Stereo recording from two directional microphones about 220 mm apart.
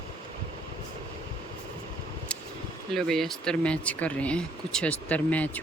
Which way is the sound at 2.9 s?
Centre (ahead or behind).